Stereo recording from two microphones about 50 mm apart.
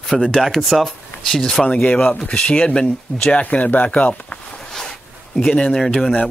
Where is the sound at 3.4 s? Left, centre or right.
Left.